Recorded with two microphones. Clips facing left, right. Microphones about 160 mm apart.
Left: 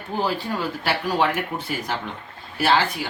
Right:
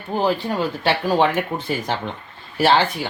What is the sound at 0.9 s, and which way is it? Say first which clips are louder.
Speech: right 4 dB; 25° right (ahead or behind).